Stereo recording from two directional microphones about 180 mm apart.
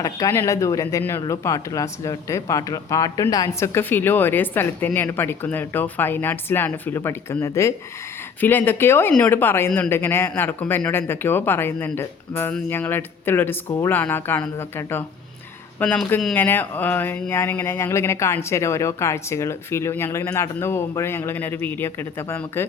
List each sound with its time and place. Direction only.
0.0 s speech: 15° left (ahead or behind)